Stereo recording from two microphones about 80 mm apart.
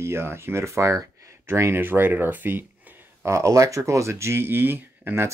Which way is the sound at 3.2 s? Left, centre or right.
Right.